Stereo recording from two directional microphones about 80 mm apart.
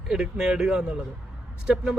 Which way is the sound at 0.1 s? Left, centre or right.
Centre.